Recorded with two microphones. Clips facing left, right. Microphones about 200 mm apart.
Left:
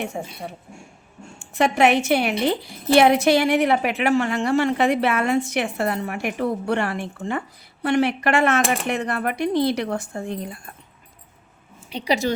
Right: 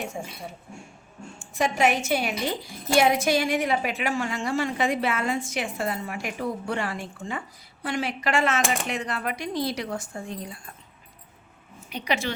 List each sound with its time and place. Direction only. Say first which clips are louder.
0.0 s a woman's voice: left 4 dB; 65° left (ahead or behind)
11.9 s a woman's voice: left 6 dB; 30° left (ahead or behind)